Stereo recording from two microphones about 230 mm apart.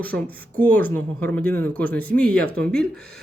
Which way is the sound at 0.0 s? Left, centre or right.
Centre.